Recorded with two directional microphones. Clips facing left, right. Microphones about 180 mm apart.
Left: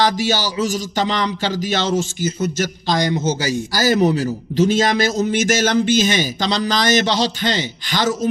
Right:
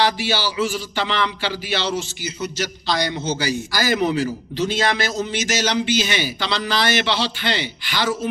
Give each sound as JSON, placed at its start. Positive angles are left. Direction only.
{"t": 0.0, "sound": "a man's voice", "side_deg": 45}